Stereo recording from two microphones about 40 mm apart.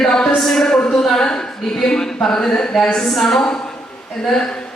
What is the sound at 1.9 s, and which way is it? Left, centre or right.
A man's voice, centre.